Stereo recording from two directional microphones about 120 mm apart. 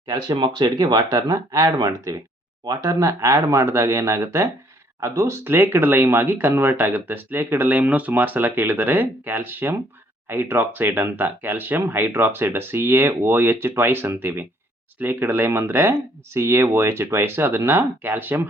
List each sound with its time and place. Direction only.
0.1 s speech: 35° right (ahead or behind); by 18.4 s 15° right (ahead or behind)